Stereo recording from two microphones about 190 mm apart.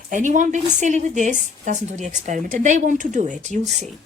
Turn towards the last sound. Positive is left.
turn(degrees=-35)  # may be behind; listen again after turning